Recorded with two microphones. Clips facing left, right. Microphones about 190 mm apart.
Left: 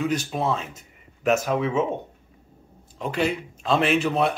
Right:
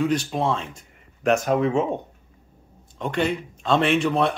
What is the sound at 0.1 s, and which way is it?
Speech, 30° right (ahead or behind).